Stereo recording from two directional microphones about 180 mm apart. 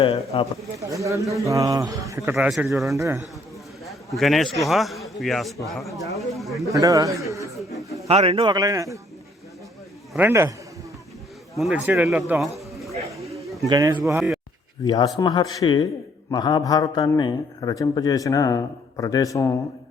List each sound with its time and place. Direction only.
0.0 s speech: 30° left (ahead or behind)
0.8 s a man's voice: 15° right (ahead or behind)
2.7 s a man's voice: centre (ahead or behind)
3.0 s a man's voice: 15° right (ahead or behind)
4.2 s a man's voice: centre (ahead or behind)
6.7 s a man's voice: 20° right (ahead or behind)
8.0 s a man's voice: 35° right (ahead or behind)
10.1 s a man's voice: 10° right (ahead or behind)
11.5 s speech: 5° right (ahead or behind)
13.7 s a man's voice: 20° right (ahead or behind)
14.8 s a man's voice: 20° left (ahead or behind)